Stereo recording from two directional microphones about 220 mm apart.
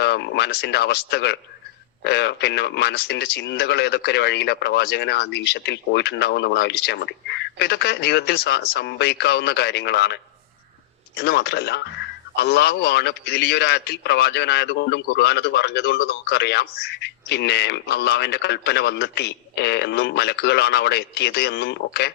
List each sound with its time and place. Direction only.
0.0 s a man's voice: 50° left (ahead or behind)
11.2 s a man's voice: 50° left (ahead or behind)